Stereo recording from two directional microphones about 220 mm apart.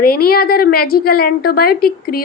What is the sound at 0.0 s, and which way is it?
A woman's voice, 45° left (ahead or behind).